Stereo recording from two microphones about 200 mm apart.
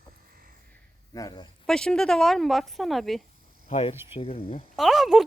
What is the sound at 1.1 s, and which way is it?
Speech, 15° left (ahead or behind).